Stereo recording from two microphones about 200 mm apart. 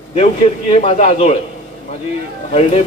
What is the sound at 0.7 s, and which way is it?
Speech, 30° left (ahead or behind).